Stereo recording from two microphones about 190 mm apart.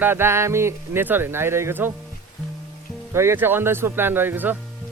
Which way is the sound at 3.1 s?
15° right (ahead or behind).